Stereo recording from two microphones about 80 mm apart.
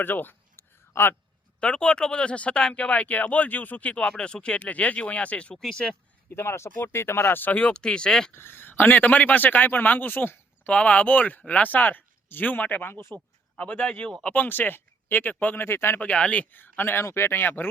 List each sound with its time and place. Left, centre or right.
0.0 s a sound: left
1.6 s speech: centre
6.3 s speech: left; by 8.3 s centre
8.3 s speech: left
13.6 s speech: centre
14.3 s speech: left
16.0 s speech: centre